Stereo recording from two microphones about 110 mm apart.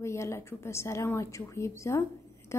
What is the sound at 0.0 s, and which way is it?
A woman's voice, 25° left (ahead or behind).